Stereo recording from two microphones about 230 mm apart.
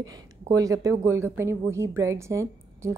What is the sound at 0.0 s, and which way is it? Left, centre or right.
A woman's voice, centre.